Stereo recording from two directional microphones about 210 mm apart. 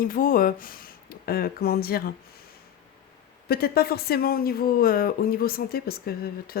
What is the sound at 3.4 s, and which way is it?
Speech, 45° left (ahead or behind).